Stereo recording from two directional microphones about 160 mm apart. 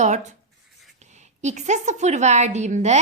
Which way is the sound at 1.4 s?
50° right (ahead or behind).